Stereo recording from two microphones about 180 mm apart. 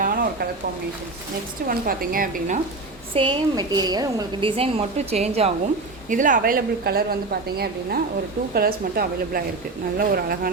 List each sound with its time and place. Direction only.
0.0 s a sound: 50° right (ahead or behind)
1.6 s a woman's voice: 55° right (ahead or behind)
3.2 s a woman's voice: 25° right (ahead or behind)
6.1 s a woman's voice: 45° right (ahead or behind)